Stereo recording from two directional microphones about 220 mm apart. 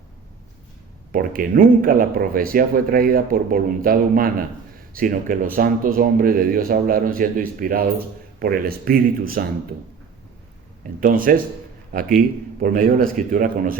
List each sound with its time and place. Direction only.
1.1 s speech: 40° right (ahead or behind)
11.0 s speech: 40° right (ahead or behind)